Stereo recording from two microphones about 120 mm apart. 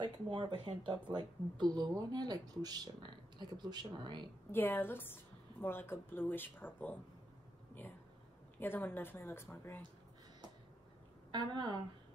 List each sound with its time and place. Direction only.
0.0 s speech: 45° right (ahead or behind)
4.5 s a woman's voice: 15° left (ahead or behind)
8.5 s a woman's voice: 15° left (ahead or behind)
11.3 s speech: 35° right (ahead or behind)